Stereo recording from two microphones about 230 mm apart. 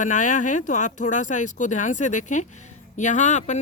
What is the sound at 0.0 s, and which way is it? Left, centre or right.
A woman's voice, left.